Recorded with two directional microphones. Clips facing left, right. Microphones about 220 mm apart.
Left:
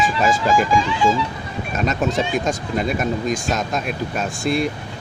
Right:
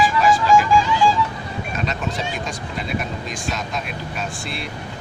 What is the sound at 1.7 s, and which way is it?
Speech, 45° left (ahead or behind).